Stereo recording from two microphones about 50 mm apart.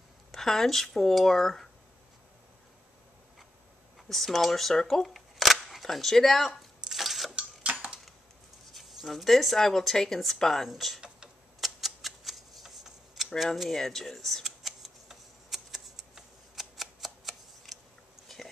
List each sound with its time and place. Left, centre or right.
0.3 s speech: centre
4.1 s camera: centre
7.3 s tick-tock: right
8.7 s speech: centre
11.6 s a sound: centre
13.4 s speech: centre
13.7 s camera: centre